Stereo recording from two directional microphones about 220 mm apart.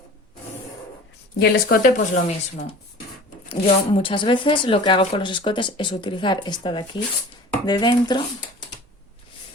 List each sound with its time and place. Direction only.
1.4 s speech: 40° left (ahead or behind)
3.5 s speech: 25° left (ahead or behind)